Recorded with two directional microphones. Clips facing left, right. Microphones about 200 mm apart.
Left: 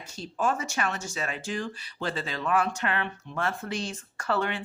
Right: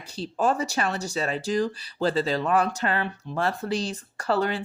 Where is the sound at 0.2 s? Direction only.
35° right (ahead or behind).